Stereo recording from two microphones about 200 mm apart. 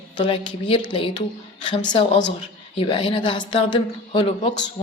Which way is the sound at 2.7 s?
25° left (ahead or behind).